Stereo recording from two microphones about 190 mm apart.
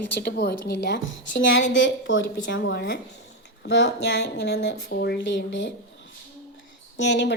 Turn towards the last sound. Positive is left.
turn(degrees=65)  # may be behind; listen again after turning